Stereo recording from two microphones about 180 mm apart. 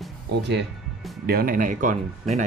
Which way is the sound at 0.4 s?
70° right (ahead or behind).